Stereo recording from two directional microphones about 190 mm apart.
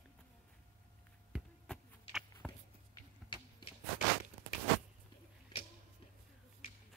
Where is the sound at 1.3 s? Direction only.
5° right (ahead or behind).